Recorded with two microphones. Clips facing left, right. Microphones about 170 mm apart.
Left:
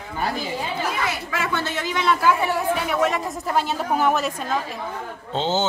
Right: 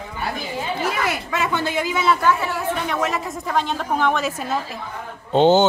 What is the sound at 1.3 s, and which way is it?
Speech, 20° right (ahead or behind).